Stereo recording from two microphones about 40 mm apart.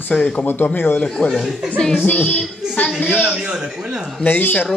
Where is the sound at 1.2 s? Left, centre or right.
Left.